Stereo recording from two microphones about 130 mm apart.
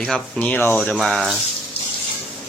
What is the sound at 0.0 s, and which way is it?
Speech, 10° left (ahead or behind).